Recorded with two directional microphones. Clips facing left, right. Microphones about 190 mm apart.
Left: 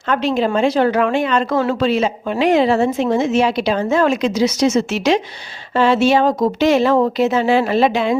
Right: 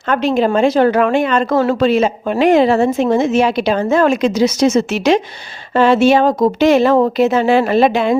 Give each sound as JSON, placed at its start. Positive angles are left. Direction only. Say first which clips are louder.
{"t": 0.1, "sound": "speech", "louder": "right 3 dB", "side_deg": -50}